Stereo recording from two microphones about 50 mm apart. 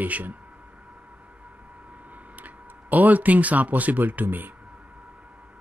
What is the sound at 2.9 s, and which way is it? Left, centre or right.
Speech, right.